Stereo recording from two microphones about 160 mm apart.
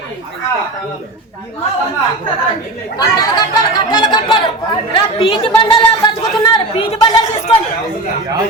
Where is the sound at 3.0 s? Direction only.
25° left (ahead or behind).